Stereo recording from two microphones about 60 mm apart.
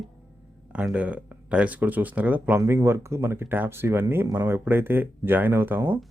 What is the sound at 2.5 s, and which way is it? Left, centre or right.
Speech, right.